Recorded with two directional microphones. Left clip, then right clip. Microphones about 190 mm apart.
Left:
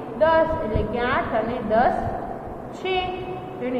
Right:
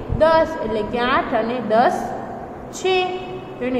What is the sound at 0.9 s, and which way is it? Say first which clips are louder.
Speech: right 4 dB; 35° right (ahead or behind).